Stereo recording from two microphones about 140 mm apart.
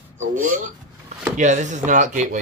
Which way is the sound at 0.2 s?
70° right (ahead or behind).